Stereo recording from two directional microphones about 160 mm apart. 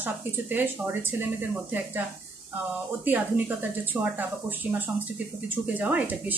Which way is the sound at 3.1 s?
10° right (ahead or behind).